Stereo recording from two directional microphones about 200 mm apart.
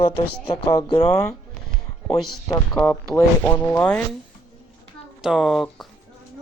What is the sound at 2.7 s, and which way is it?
Speech, 10° left (ahead or behind).